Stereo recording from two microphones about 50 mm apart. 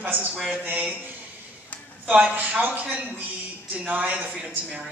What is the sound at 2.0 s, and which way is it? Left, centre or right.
A man's voice, right.